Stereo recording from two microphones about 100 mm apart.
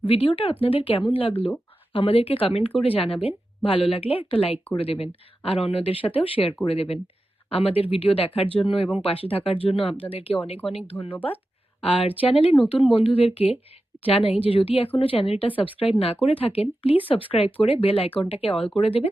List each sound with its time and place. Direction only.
0.0 s speech: 65° left (ahead or behind)
6.7 s speech: 80° left
10.9 s speech: 15° left (ahead or behind)
11.8 s speech: 75° left (ahead or behind)